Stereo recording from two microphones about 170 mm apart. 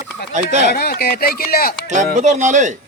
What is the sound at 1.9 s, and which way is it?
Speech, 45° right (ahead or behind).